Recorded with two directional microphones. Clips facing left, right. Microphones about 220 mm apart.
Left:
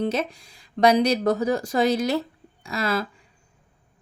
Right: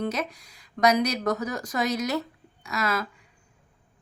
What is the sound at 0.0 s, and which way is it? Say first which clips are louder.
Speech: left 4 dB; 30° left (ahead or behind).